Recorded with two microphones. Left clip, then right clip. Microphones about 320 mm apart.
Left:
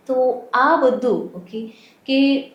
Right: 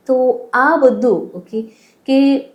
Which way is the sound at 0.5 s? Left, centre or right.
Right.